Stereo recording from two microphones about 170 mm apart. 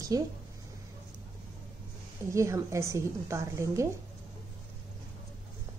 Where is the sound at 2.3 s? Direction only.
15° right (ahead or behind).